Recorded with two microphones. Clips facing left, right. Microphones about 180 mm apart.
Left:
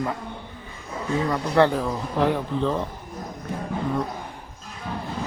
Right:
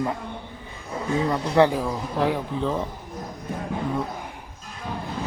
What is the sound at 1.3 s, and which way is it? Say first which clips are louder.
A man's voice: even; 15° right (ahead or behind).